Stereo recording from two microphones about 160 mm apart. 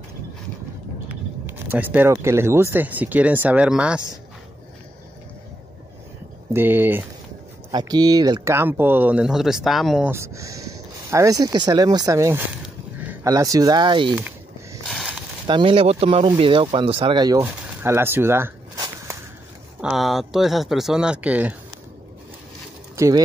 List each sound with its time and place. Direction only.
1.4 s speech: 15° right (ahead or behind)
6.5 s speech: 15° right (ahead or behind)
7.7 s speech: 25° right (ahead or behind); by 10.1 s centre (ahead or behind)
10.1 s speech: 20° right (ahead or behind)
13.0 s a sound: 10° right (ahead or behind)
13.3 s speech: 20° right (ahead or behind)
14.1 s a sound: 10° right (ahead or behind)
14.9 s a sound: centre (ahead or behind)
15.4 s speech: 30° right (ahead or behind)
17.4 s walk: 15° right (ahead or behind)
19.8 s speech: centre (ahead or behind)
22.9 s speech: 20° right (ahead or behind)